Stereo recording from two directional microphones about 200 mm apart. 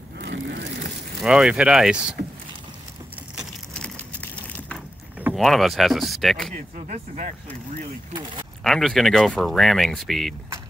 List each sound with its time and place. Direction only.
0.2 s a sound: 60° right (ahead or behind)
1.2 s speech: 5° right (ahead or behind)
3.3 s a sound: 5° left (ahead or behind)
5.2 s speech: centre (ahead or behind)
6.5 s speech: 40° right (ahead or behind)
8.6 s speech: centre (ahead or behind)